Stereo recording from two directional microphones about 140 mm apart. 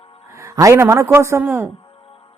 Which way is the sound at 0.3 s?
25° right (ahead or behind).